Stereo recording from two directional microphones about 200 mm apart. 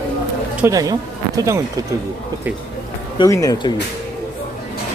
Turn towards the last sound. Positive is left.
turn(degrees=15)  # may be behind; listen again after turning